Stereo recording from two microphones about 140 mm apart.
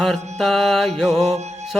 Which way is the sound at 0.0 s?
Centre (ahead or behind).